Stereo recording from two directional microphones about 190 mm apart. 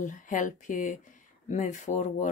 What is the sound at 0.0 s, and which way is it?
Speech, 40° left (ahead or behind).